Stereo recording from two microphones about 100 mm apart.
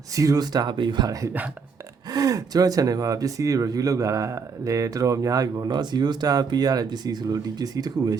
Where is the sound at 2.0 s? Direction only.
40° right (ahead or behind).